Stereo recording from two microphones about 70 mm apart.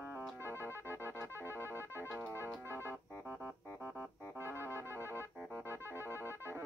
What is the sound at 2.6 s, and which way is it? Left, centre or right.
Music, right.